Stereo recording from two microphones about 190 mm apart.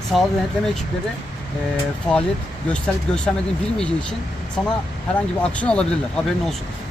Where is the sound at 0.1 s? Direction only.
Centre (ahead or behind).